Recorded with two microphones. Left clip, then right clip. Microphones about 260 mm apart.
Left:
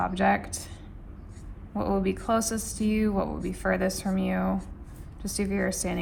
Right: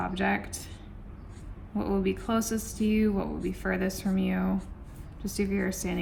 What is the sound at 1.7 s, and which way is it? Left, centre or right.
Speech, left.